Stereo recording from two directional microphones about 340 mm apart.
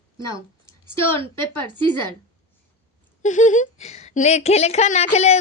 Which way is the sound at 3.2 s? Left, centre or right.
Left.